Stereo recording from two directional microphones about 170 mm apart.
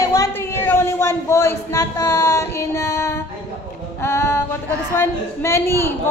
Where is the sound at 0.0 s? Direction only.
20° left (ahead or behind).